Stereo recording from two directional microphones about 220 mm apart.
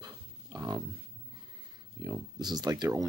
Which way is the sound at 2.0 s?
20° right (ahead or behind).